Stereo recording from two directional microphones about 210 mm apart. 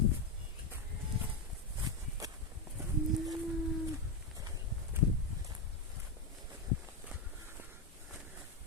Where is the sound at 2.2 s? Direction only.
15° right (ahead or behind).